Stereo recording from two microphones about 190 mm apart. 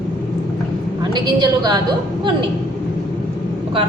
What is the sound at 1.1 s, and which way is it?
Speech, 25° right (ahead or behind).